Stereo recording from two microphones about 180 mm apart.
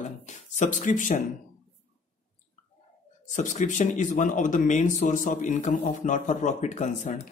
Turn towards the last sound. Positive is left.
turn(degrees=40)  # may be behind; listen again after turning